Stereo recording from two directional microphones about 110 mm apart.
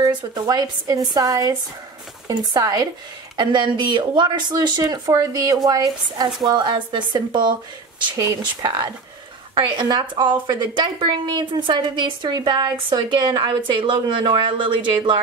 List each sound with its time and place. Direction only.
0.0 s speech: 40° right (ahead or behind)